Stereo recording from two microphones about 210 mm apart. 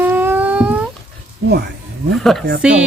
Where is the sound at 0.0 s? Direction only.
10° right (ahead or behind).